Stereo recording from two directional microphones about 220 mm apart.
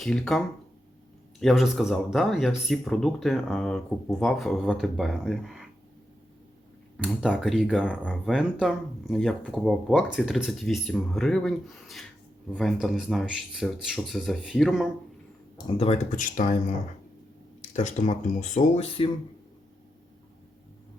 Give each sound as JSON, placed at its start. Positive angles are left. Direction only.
{"t": 0.0, "sound": "speech", "side_deg": 0}
{"t": 6.9, "sound": "speech", "side_deg": 0}
{"t": 15.5, "sound": "speech", "side_deg": 25}